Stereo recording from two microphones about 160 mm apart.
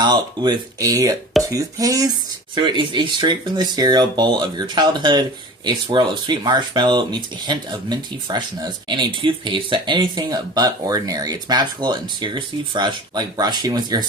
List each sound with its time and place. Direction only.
0.0 s speech: 25° right (ahead or behind)